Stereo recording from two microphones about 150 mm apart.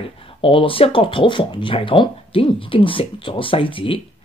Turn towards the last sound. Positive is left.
turn(degrees=35)  # may be behind; listen again after turning